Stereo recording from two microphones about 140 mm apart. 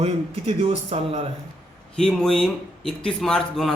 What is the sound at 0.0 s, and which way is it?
A man's voice, 45° right (ahead or behind).